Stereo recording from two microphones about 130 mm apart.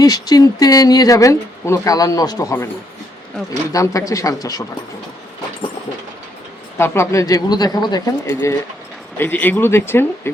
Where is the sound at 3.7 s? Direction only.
25° left (ahead or behind).